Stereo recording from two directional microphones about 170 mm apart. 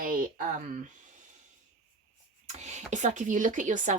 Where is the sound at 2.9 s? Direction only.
45° right (ahead or behind).